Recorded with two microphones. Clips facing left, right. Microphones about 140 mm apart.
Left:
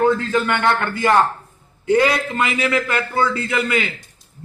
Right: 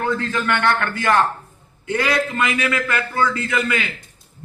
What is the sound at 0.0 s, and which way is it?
A man's voice, 25° left (ahead or behind).